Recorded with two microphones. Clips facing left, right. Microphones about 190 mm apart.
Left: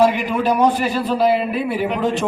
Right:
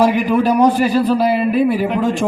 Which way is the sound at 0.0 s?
45° right (ahead or behind).